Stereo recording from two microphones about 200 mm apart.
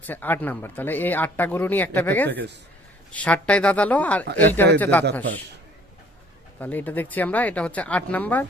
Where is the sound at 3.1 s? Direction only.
5° left (ahead or behind).